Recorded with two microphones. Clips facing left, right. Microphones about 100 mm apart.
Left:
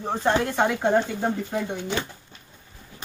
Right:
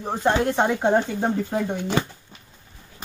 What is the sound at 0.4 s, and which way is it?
Speech, 20° right (ahead or behind).